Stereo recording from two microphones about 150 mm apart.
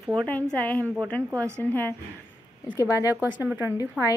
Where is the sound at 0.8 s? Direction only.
10° right (ahead or behind).